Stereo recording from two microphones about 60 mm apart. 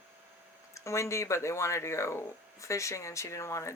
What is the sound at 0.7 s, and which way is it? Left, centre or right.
Speech, left.